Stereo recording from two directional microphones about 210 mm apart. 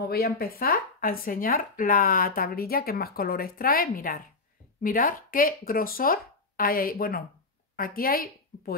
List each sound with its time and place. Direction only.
0.0 s a woman's voice: 45° left (ahead or behind)